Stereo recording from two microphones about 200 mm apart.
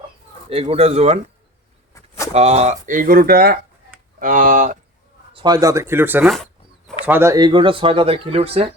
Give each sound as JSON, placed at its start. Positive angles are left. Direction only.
{"t": 0.5, "sound": "speech", "side_deg": -30}
{"t": 2.3, "sound": "speech", "side_deg": -30}
{"t": 5.3, "sound": "speech", "side_deg": -20}
{"t": 6.3, "sound": "dog", "side_deg": 0}
{"t": 7.0, "sound": "speech", "side_deg": -10}